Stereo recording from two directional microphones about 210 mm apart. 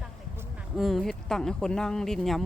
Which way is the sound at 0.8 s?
Centre (ahead or behind).